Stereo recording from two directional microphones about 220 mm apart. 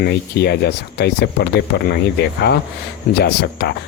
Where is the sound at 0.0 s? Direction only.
50° left (ahead or behind).